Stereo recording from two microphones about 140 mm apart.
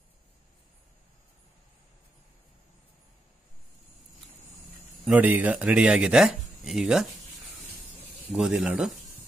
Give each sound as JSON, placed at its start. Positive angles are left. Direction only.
{"t": 5.0, "sound": "speech", "side_deg": -10}
{"t": 8.3, "sound": "speech", "side_deg": -5}